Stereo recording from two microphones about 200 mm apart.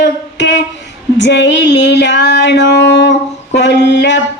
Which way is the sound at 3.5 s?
60° left (ahead or behind).